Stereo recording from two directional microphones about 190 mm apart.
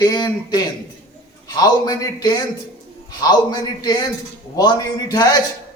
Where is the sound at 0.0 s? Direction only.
20° left (ahead or behind).